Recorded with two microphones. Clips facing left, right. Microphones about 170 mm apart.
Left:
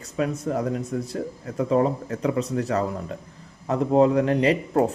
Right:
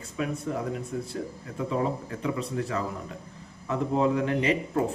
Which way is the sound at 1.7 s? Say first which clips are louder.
Left 7 dB; 45° left (ahead or behind).